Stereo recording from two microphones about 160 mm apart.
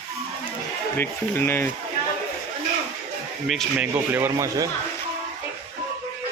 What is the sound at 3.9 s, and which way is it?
Speech, 15° right (ahead or behind).